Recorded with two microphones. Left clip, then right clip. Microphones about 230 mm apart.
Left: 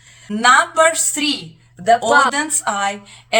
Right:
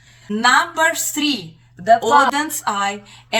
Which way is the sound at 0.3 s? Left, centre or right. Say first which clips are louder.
Left 2 dB; centre.